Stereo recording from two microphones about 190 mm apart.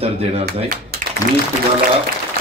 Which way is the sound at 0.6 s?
55° right (ahead or behind).